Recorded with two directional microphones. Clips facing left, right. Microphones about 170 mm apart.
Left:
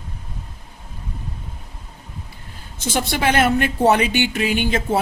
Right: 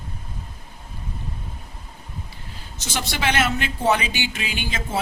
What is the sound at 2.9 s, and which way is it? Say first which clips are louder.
Speech: left 5 dB; 50° left (ahead or behind).